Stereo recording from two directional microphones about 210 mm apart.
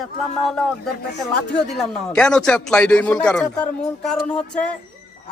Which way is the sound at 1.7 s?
Centre (ahead or behind).